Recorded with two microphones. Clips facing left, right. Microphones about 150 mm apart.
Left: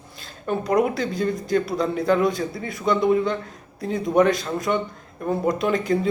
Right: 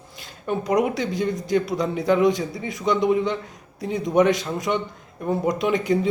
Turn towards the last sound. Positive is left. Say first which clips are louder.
# even
turn(degrees=-15)  # may be behind; listen again after turning